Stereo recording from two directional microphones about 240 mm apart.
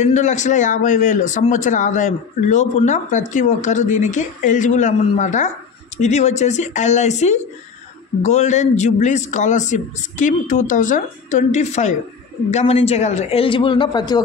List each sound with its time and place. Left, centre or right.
0.0 s a man's voice: left